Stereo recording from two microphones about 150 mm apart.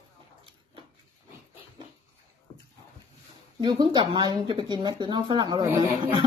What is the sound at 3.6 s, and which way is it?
A woman's voice, 30° right (ahead or behind).